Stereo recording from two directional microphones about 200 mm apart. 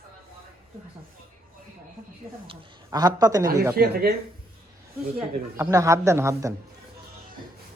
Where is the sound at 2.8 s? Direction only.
20° right (ahead or behind).